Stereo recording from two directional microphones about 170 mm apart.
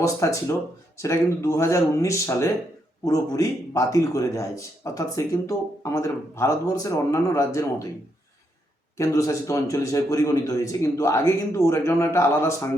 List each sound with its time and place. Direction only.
0.0 s a man's voice: 20° left (ahead or behind)
9.0 s a man's voice: 20° left (ahead or behind)